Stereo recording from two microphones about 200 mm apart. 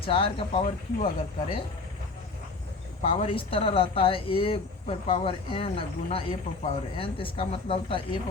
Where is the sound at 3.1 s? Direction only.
30° left (ahead or behind).